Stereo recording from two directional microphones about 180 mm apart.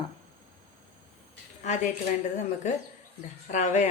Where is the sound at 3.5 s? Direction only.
40° left (ahead or behind).